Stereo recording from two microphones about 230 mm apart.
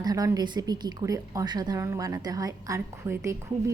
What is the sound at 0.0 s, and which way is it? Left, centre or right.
Speech, centre.